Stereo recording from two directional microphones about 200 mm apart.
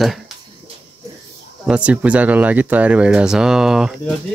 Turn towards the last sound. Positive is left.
turn(degrees=0)  # may be behind; listen again after turning